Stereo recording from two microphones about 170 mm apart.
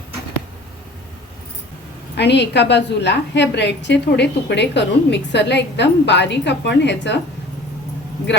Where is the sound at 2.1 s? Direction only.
90° left.